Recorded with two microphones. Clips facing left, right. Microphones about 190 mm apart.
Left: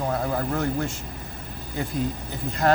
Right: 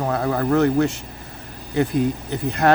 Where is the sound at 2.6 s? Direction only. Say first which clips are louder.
Right 4 dB; 70° right (ahead or behind).